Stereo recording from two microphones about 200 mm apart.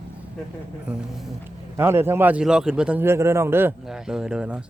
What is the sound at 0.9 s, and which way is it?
A man's voice, 5° right (ahead or behind).